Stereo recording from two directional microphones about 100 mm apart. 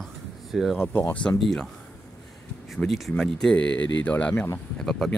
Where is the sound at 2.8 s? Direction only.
Centre (ahead or behind).